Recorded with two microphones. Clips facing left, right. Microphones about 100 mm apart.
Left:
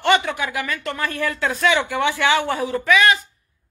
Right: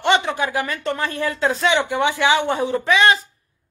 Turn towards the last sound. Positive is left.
turn(degrees=-30)  # may be behind; listen again after turning